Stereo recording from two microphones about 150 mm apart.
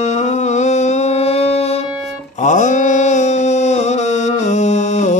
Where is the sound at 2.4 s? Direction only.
55° left (ahead or behind).